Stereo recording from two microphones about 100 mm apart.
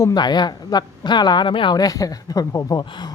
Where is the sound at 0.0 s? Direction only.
45° left (ahead or behind).